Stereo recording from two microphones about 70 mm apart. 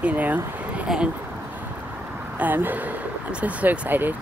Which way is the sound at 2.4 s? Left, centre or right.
Right.